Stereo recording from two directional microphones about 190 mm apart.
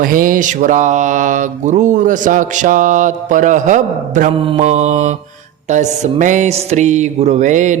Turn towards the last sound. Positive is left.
turn(degrees=-40)  # may be behind; listen again after turning